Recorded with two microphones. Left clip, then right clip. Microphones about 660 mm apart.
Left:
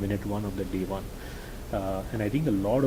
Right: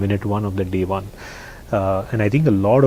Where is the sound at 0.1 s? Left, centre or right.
Right.